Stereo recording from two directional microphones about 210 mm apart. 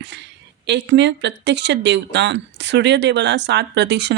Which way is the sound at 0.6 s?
55° right (ahead or behind).